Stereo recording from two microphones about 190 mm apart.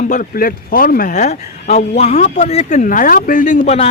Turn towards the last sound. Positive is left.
turn(degrees=35)  # may be behind; listen again after turning